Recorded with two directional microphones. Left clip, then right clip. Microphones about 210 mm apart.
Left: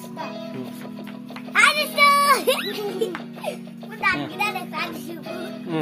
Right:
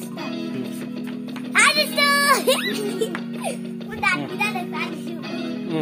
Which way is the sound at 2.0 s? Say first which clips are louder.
Left 5 dB; 10° right (ahead or behind).